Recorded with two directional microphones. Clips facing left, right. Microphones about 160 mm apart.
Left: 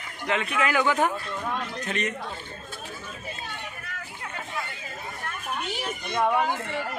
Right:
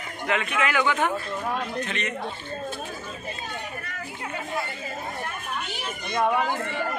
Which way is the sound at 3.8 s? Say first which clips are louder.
Right 3 dB; centre (ahead or behind).